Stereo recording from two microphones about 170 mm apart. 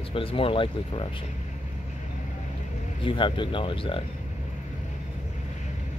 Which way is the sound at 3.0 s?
30° left (ahead or behind).